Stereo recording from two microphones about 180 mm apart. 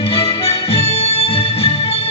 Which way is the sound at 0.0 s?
30° left (ahead or behind).